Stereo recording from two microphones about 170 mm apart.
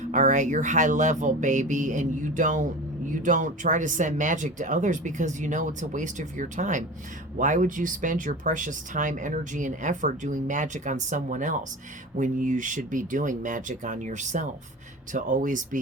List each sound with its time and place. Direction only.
0.0 s speech: 45° right (ahead or behind)